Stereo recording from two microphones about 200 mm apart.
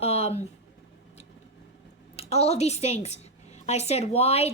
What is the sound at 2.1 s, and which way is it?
A woman's voice, 30° left (ahead or behind).